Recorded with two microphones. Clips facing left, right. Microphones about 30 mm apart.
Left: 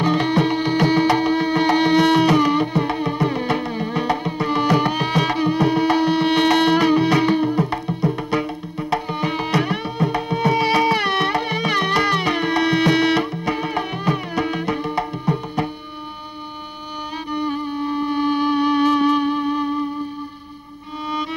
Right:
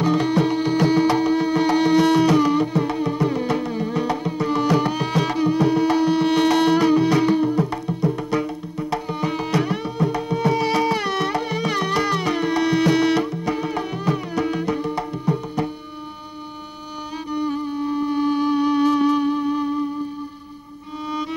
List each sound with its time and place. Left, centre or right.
0.0 s music: left
17.3 s music: left